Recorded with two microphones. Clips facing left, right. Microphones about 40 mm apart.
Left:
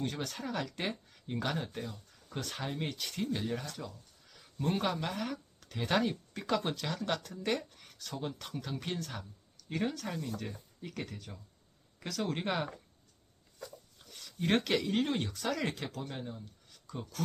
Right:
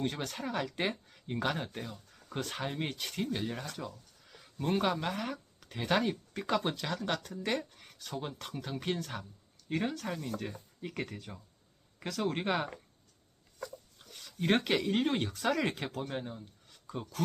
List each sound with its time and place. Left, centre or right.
0.0 s speech: centre
14.1 s a sound: centre
14.3 s speech: centre
16.9 s speech: right